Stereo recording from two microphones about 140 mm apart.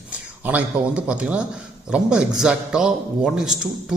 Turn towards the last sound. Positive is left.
turn(degrees=-5)  # may be behind; listen again after turning